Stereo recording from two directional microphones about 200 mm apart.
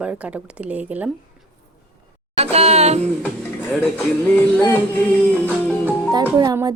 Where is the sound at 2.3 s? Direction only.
30° right (ahead or behind).